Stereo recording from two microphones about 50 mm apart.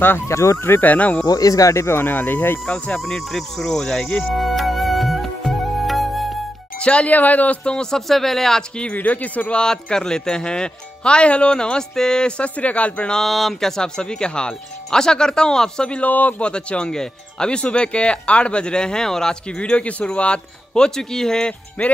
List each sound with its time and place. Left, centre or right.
0.3 s speech: left
0.7 s speech: left
1.7 s speech: left
2.0 s speech: left
2.7 s speech: left
3.3 s speech: centre
4.3 s music: centre
6.8 s speech: left
7.6 s speech: centre
8.9 s speech: left
9.6 s speech: centre
13.1 s speech: centre
16.1 s speech: left; by 19.3 s centre
19.6 s speech: left